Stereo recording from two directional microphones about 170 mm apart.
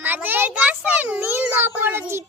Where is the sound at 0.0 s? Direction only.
10° right (ahead or behind).